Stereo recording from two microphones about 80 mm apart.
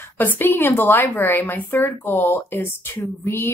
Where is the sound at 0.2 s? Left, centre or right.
Left.